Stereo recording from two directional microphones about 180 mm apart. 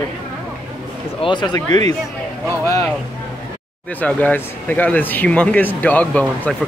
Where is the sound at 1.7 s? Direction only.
35° right (ahead or behind).